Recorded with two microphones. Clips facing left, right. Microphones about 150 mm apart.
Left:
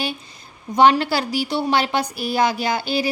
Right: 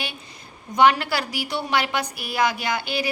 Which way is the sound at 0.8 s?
30° left (ahead or behind).